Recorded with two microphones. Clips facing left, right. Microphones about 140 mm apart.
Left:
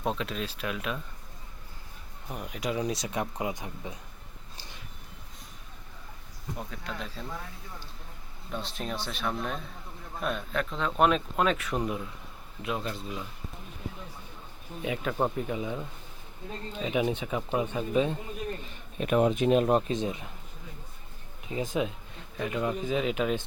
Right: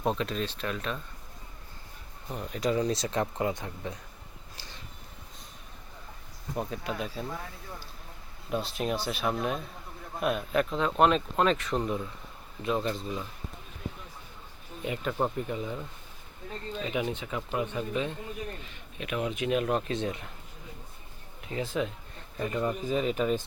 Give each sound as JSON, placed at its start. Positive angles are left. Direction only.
{"t": 0.0, "sound": "speech", "side_deg": 0}
{"t": 2.3, "sound": "speech", "side_deg": 10}
{"t": 6.6, "sound": "speech", "side_deg": -20}
{"t": 8.4, "sound": "speech", "side_deg": -10}
{"t": 14.8, "sound": "speech", "side_deg": 5}
{"t": 16.8, "sound": "speech", "side_deg": 20}
{"t": 18.9, "sound": "speech", "side_deg": 40}
{"t": 19.9, "sound": "speech", "side_deg": 15}
{"t": 21.5, "sound": "speech", "side_deg": 15}
{"t": 22.4, "sound": "speech", "side_deg": 5}